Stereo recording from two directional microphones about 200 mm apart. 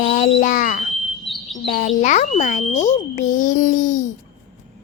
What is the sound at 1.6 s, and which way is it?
A child's voice, 45° left (ahead or behind).